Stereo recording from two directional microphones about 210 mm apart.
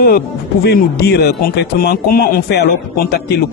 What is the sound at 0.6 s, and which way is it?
A woman's voice, 50° left (ahead or behind).